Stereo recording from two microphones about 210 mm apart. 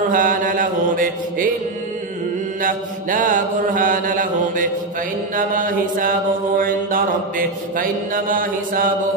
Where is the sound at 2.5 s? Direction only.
40° right (ahead or behind).